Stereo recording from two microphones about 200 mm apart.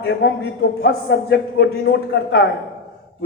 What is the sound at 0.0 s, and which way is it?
A man's voice, 55° left (ahead or behind).